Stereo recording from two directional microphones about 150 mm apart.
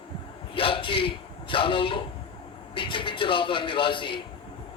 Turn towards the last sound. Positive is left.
turn(degrees=35)  # may be behind; listen again after turning